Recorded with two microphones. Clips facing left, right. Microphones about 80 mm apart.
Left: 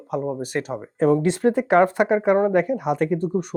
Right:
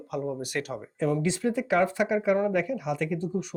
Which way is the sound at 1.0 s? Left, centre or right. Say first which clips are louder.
Left 8 dB; left.